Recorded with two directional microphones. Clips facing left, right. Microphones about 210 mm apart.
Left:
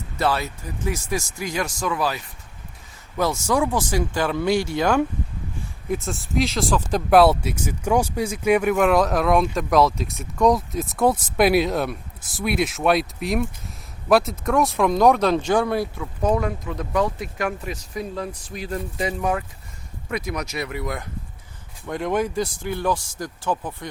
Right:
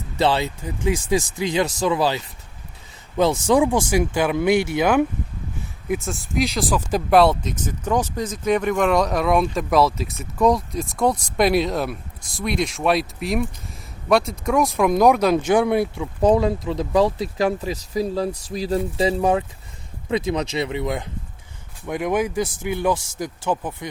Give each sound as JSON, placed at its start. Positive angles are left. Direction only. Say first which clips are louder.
{"t": 0.2, "sound": "speech", "louder": "right 3 dB", "side_deg": -25}
{"t": 3.4, "sound": "speech", "louder": "right 4 dB", "side_deg": -15}
{"t": 5.9, "sound": "speech", "louder": "even", "side_deg": 0}
{"t": 14.8, "sound": "speech", "louder": "right 1 dB", "side_deg": -10}